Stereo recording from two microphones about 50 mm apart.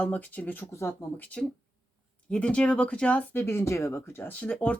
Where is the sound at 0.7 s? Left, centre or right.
Left.